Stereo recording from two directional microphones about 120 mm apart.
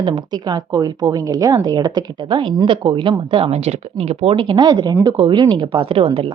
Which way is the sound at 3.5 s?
60° right (ahead or behind).